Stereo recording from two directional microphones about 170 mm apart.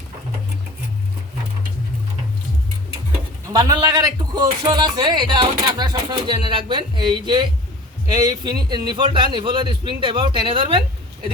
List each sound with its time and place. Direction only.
3.4 s speech: 20° right (ahead or behind)